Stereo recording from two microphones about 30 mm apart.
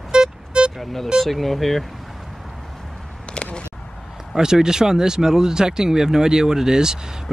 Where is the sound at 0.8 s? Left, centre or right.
Centre.